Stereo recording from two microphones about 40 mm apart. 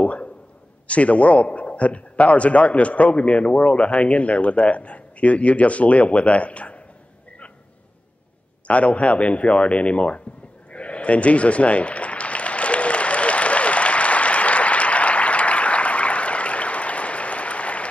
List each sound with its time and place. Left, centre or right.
0.0 s a sound: left
0.8 s a man's voice: left
8.6 s a man's voice: left
10.7 s applause: left